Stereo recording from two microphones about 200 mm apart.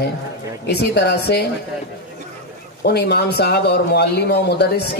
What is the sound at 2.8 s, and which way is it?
Speech, 55° left (ahead or behind).